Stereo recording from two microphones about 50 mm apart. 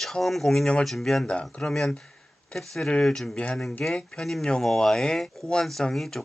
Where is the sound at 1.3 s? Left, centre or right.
Left.